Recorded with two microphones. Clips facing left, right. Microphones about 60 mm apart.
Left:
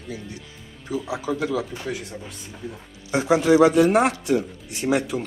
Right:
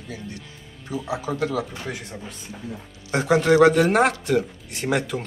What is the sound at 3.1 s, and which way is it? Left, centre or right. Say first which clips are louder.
Speech: even; right.